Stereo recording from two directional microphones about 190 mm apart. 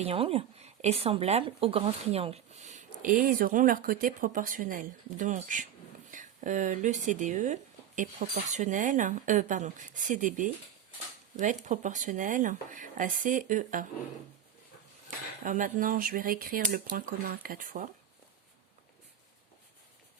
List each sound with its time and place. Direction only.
0.0 s speech: 30° right (ahead or behind)
15.4 s speech: 45° right (ahead or behind)